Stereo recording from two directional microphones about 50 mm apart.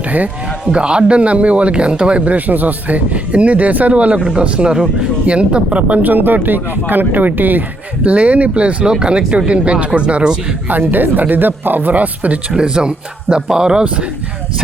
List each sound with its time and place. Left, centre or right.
0.7 s speech: centre
6.0 s speech: right
8.0 s speech: right
10.7 s speech: right
12.5 s speech: centre